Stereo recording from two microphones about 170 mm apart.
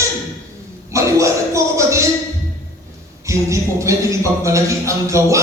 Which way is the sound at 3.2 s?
15° right (ahead or behind).